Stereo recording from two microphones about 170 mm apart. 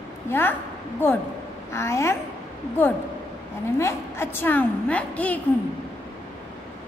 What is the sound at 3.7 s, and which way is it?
A woman's voice, 15° left (ahead or behind).